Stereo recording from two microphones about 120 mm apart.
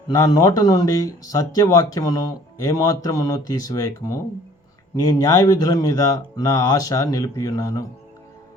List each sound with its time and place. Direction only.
0.1 s speech: 30° left (ahead or behind)